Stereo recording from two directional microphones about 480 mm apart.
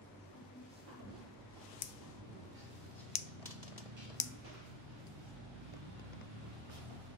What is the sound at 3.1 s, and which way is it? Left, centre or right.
Typewriter, centre.